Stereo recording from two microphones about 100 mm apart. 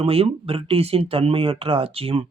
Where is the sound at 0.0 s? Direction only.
75° right (ahead or behind).